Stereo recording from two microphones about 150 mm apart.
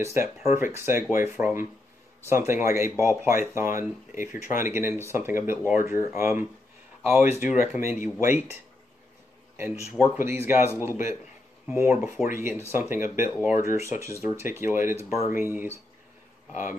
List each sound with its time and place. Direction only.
0.0 s speech: 15° right (ahead or behind)
9.6 s speech: 15° right (ahead or behind)